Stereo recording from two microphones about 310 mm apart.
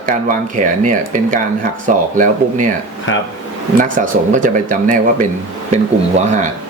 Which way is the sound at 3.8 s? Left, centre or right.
Right.